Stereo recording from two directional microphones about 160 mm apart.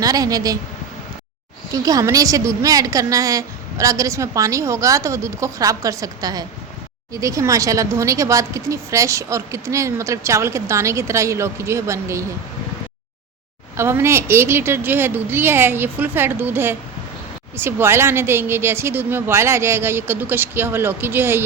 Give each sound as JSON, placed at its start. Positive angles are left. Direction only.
{"t": 0.0, "sound": "speech", "side_deg": -25}
{"t": 1.7, "sound": "speech", "side_deg": -20}
{"t": 13.7, "sound": "a woman's voice", "side_deg": -15}